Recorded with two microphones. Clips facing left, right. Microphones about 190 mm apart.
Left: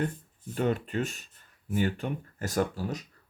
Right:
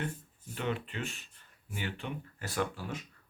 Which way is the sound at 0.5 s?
45° left (ahead or behind).